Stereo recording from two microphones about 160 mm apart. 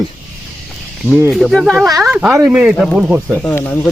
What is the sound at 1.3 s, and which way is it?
Speech, centre (ahead or behind).